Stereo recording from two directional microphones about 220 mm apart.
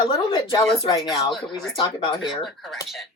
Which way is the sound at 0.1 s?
20° left (ahead or behind).